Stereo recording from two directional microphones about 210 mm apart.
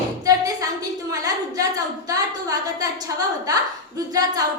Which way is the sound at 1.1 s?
15° right (ahead or behind).